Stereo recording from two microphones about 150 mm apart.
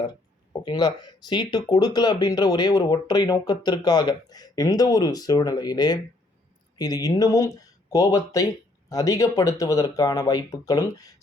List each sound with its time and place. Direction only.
0.6 s speech: 30° left (ahead or behind)